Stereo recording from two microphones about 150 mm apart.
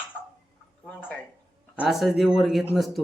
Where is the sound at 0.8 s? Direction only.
10° left (ahead or behind).